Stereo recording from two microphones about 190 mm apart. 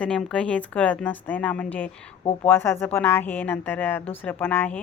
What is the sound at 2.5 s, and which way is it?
Speech, 10° left (ahead or behind).